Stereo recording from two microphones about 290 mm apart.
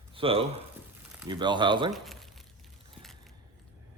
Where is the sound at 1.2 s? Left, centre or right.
Centre.